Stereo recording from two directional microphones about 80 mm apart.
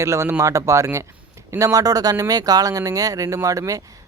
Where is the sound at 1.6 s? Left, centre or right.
Right.